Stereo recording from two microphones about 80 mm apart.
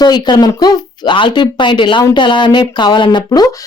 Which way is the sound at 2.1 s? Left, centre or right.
Left.